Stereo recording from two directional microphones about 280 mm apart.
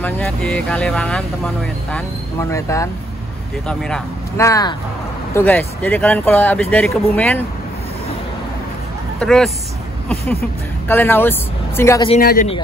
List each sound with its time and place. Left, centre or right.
0.0 s speech: centre
9.2 s speech: centre
10.9 s speech: centre
12.1 s a man's voice: left